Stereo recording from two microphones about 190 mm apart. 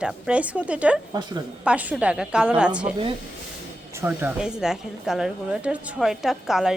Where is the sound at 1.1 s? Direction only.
20° right (ahead or behind).